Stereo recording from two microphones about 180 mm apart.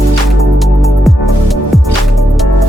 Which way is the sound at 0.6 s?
Centre (ahead or behind).